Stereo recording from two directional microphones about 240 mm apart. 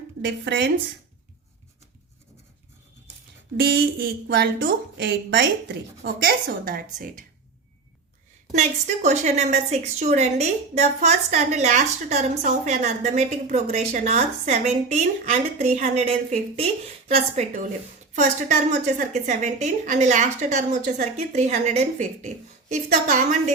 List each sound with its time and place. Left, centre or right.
0.2 s speech: right
3.6 s a woman's voice: right
8.5 s a woman's voice: right